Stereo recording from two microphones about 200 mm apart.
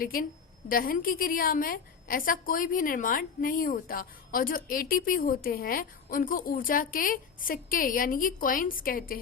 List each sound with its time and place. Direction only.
0.0 s a woman's voice: 45° left (ahead or behind)